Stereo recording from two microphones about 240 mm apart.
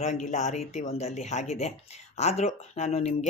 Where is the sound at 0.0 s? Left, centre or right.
Left.